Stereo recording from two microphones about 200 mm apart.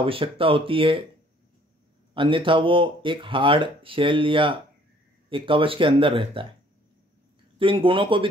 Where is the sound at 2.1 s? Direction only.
25° right (ahead or behind).